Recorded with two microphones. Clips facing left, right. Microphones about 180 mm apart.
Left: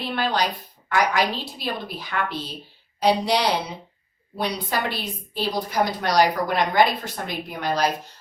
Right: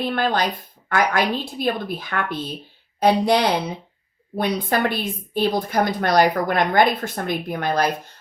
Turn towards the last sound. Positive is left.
turn(degrees=-55)  # may be behind; listen again after turning